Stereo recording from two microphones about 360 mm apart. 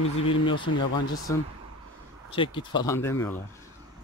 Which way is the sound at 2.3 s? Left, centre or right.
Centre.